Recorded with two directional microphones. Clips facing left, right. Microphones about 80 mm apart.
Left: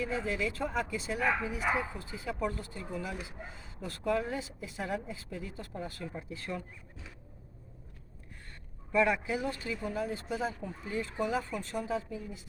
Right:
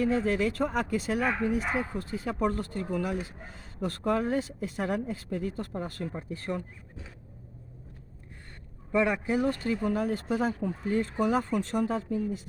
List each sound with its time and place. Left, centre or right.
0.0 s speech: right
8.9 s speech: right
9.3 s speech: right